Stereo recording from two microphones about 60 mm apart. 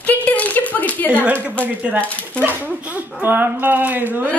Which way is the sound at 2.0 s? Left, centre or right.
Left.